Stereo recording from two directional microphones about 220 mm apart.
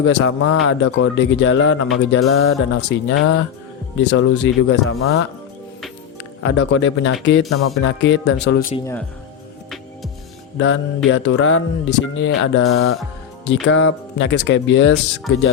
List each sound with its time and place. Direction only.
0.0 s speech: 60° left (ahead or behind)
6.4 s speech: 55° left (ahead or behind)
10.6 s speech: 60° left (ahead or behind)
13.5 s speech: 55° left (ahead or behind)